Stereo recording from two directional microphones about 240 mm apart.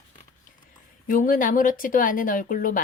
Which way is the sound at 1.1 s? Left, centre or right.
Left.